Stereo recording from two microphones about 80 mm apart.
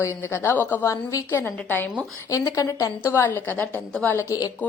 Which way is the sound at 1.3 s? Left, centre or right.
Left.